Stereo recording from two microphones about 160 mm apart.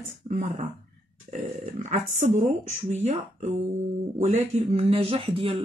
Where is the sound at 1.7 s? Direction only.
50° right (ahead or behind).